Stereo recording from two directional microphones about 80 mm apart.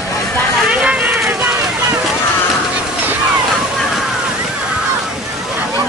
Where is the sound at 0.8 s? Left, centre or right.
Centre.